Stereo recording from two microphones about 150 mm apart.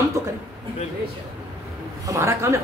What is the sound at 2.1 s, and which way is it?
Speech, 20° right (ahead or behind).